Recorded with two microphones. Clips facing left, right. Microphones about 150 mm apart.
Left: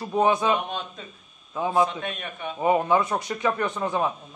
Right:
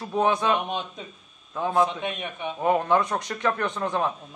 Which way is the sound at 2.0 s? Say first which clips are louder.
Right 2 dB; 20° right (ahead or behind).